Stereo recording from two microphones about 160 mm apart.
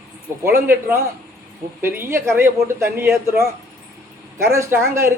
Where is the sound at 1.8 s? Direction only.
15° right (ahead or behind).